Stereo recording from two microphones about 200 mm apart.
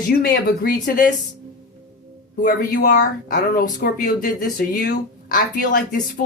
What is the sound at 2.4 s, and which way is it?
Speech, 45° left (ahead or behind).